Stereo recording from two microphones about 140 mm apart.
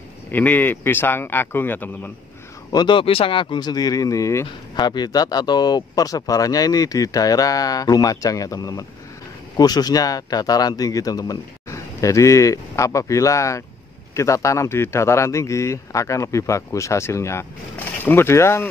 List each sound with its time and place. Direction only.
0.3 s speech: 15° left (ahead or behind)
2.7 s speech: 35° left (ahead or behind)